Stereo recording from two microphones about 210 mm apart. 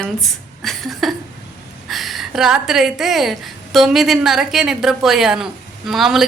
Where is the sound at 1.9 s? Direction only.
Centre (ahead or behind).